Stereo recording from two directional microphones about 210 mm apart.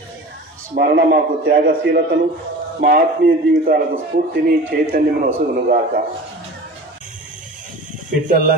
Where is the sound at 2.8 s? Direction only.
45° right (ahead or behind).